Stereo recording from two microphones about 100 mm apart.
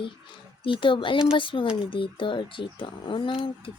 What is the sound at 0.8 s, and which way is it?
Speech, 55° left (ahead or behind).